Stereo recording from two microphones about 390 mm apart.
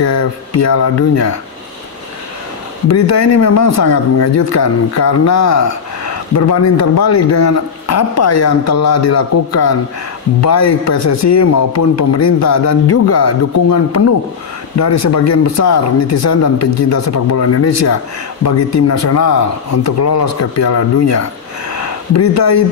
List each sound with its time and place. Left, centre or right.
0.0 s speech: left
2.9 s speech: left
14.8 s speech: left
22.3 s speech: left